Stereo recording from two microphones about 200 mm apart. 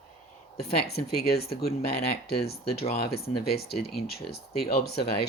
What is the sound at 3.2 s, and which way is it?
Speech, 50° left (ahead or behind).